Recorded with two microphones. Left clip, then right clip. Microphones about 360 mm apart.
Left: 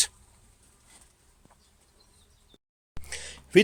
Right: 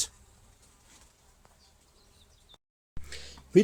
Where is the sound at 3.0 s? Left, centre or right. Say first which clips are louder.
Left 5 dB; centre.